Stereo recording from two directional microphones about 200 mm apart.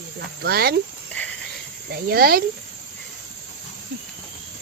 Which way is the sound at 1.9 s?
50° right (ahead or behind).